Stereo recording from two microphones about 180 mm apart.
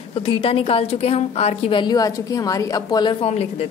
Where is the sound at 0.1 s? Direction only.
30° left (ahead or behind).